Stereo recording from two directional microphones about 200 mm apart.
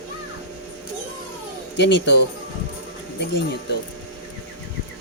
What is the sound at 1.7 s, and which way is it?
Speech, 60° left (ahead or behind).